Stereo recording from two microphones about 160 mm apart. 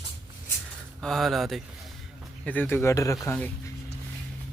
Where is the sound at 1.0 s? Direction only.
Centre (ahead or behind).